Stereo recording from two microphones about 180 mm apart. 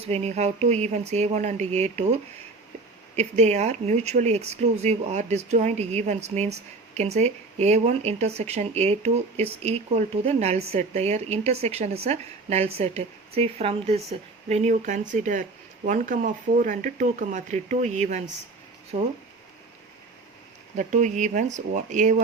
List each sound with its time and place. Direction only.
0.0 s speech: 35° right (ahead or behind)
3.2 s speech: 40° right (ahead or behind)
20.7 s speech: 45° right (ahead or behind)